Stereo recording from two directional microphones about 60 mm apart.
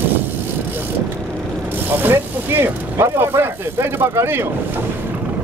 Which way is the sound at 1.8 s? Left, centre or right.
Right.